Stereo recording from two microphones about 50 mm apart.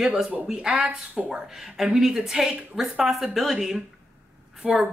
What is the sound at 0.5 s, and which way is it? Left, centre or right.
Speech, centre.